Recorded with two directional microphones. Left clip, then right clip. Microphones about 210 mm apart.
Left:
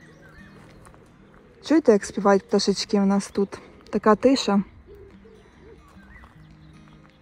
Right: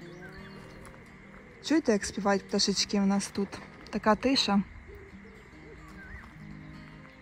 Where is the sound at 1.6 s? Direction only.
10° right (ahead or behind).